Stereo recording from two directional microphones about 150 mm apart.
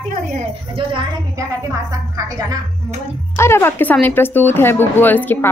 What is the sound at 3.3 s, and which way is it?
Speech, 15° left (ahead or behind).